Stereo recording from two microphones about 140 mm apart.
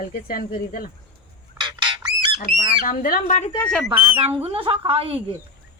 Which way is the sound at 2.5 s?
75° left (ahead or behind).